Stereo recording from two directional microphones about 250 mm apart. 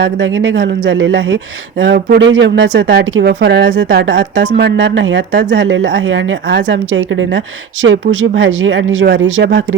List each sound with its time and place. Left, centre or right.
0.0 s speech: right